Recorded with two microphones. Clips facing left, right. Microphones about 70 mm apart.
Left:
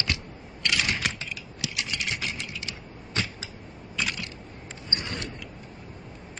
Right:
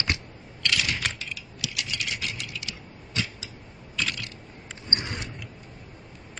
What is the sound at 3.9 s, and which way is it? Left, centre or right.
Camera, centre.